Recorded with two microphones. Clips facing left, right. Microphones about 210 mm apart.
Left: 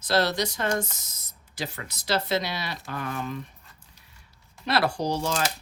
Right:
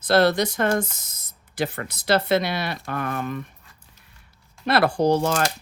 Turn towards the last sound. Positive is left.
turn(degrees=-55)  # may be behind; listen again after turning